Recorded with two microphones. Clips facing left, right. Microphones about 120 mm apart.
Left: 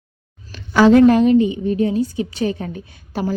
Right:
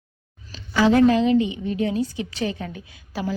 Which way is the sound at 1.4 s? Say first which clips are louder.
Left 6 dB; 35° left (ahead or behind).